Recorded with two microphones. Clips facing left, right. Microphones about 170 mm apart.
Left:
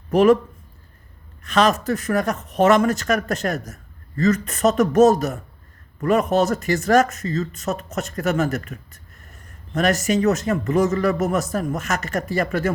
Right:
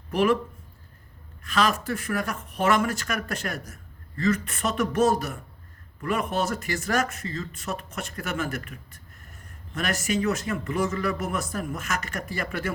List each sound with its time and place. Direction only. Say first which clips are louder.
0.1 s speech: left 8 dB; 45° left (ahead or behind)
1.5 s speech: left 6 dB; 40° left (ahead or behind)